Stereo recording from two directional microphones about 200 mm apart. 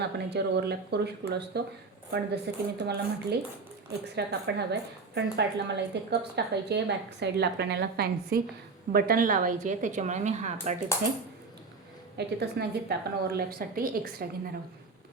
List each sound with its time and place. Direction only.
0.0 s a woman's voice: 55° right (ahead or behind); by 10.8 s 35° right (ahead or behind)
12.1 s a woman's voice: 55° right (ahead or behind)